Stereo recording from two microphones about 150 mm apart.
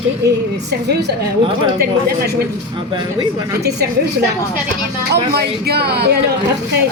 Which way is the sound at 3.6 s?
90° right.